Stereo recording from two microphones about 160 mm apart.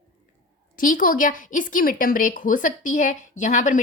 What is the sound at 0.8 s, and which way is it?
Speech, 55° left (ahead or behind).